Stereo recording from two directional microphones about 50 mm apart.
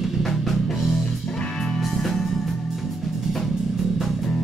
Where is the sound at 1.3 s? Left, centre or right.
Centre.